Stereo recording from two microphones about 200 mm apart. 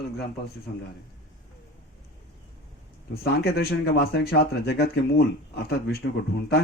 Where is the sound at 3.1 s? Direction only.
50° left (ahead or behind).